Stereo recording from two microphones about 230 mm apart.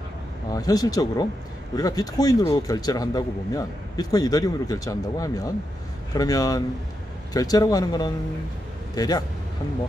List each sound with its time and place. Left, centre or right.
0.5 s a man's voice: centre